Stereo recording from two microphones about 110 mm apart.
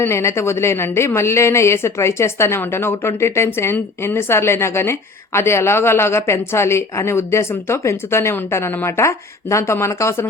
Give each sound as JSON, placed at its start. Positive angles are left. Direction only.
{"t": 0.0, "sound": "a woman's voice", "side_deg": 25}